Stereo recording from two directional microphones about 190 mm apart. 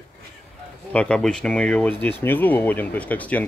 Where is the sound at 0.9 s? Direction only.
5° left (ahead or behind).